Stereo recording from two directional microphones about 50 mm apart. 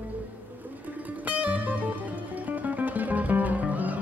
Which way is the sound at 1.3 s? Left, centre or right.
Right.